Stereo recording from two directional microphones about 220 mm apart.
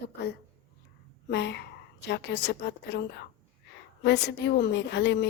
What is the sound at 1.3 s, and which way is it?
A woman's voice, 50° left (ahead or behind).